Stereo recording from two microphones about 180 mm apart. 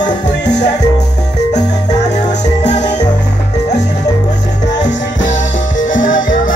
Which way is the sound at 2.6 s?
40° left (ahead or behind).